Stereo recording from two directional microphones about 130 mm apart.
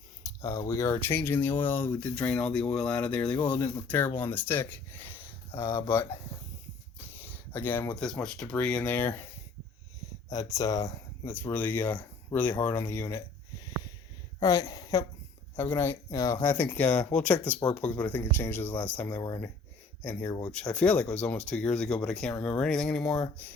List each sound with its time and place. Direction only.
0.2 s a sound: 25° left (ahead or behind)
0.7 s speech: 20° left (ahead or behind)
7.1 s a sound: 15° left (ahead or behind)
7.9 s speech: 5° left (ahead or behind)
10.2 s speech: 25° left (ahead or behind)
14.3 s speech: 25° left (ahead or behind)
15.5 s speech: 15° left (ahead or behind)
20.5 s speech: 5° left (ahead or behind)